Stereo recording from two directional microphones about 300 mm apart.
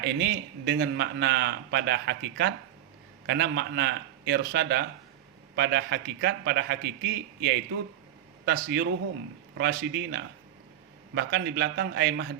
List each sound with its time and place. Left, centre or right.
0.0 s a man's voice: right